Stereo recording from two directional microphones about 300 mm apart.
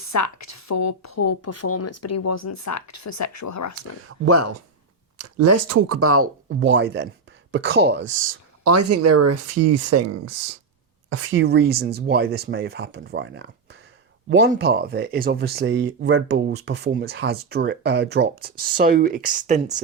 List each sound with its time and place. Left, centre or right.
0.0 s speech: left
4.3 s speech: right
11.1 s speech: right